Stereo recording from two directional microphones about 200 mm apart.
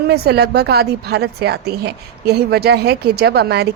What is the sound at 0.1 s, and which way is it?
A woman's voice, 55° right (ahead or behind).